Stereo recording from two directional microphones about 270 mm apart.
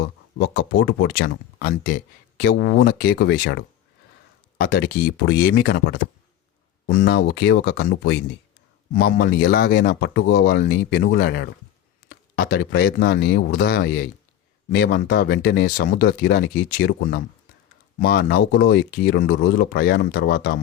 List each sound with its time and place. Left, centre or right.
0.3 s speech: left